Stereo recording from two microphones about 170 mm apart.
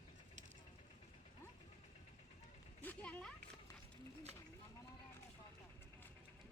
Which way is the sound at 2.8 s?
10° left (ahead or behind).